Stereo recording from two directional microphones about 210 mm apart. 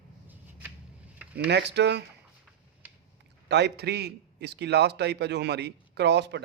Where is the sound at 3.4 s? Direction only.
55° right (ahead or behind).